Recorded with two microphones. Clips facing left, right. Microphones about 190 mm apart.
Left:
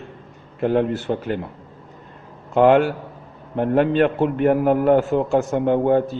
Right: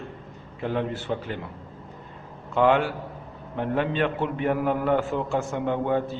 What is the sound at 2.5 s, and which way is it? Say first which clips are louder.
A man's voice: left 6 dB; 50° left (ahead or behind).